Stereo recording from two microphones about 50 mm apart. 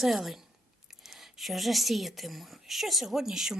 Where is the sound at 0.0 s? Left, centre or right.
Centre.